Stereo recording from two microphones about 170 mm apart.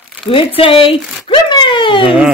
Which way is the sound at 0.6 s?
30° left (ahead or behind).